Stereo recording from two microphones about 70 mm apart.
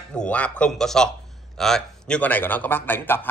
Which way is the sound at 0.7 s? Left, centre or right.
Centre.